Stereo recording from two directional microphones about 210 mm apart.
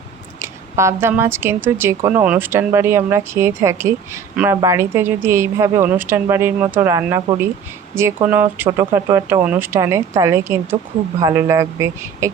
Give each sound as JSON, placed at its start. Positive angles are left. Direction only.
{"t": 0.3, "sound": "speech", "side_deg": -15}